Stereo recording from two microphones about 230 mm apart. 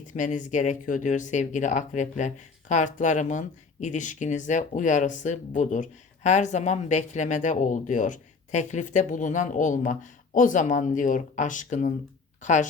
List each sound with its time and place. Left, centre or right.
0.1 s speech: left